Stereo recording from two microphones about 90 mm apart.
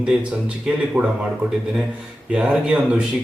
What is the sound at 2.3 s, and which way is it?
Speech, 10° right (ahead or behind).